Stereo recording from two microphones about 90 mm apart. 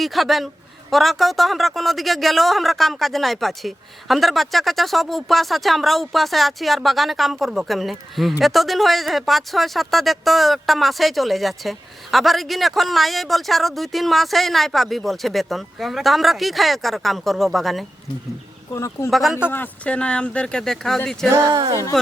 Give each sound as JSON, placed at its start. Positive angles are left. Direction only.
{"t": 0.0, "sound": "a man's voice", "side_deg": 0}
{"t": 18.7, "sound": "speech", "side_deg": 35}
{"t": 19.1, "sound": "a man's voice", "side_deg": 0}
{"t": 19.5, "sound": "speech", "side_deg": 20}
{"t": 21.2, "sound": "speech", "side_deg": -40}